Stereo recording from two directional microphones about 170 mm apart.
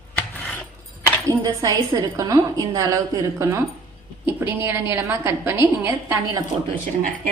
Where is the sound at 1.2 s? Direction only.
20° right (ahead or behind).